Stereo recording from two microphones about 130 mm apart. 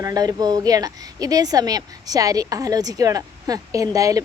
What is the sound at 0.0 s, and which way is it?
A woman's voice, 30° right (ahead or behind).